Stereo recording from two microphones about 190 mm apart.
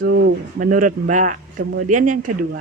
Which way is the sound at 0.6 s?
45° right (ahead or behind).